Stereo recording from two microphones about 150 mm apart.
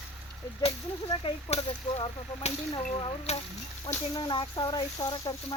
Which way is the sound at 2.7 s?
30° left (ahead or behind).